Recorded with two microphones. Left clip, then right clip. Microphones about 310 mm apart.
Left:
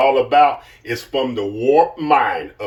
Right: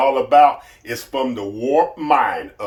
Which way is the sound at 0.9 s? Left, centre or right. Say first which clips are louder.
Left 2 dB; centre.